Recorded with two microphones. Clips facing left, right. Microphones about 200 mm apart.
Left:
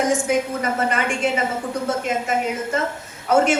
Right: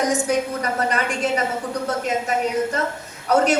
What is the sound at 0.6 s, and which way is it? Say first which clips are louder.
Speech: left 1 dB; 40° right (ahead or behind).